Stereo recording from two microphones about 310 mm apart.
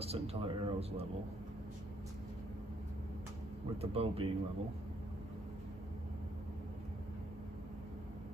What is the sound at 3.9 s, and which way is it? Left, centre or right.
Speech, centre.